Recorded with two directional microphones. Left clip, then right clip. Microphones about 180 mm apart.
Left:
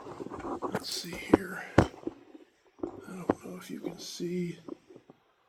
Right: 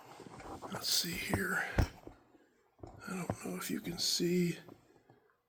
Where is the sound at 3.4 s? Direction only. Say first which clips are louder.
Left 1 dB; 35° right (ahead or behind).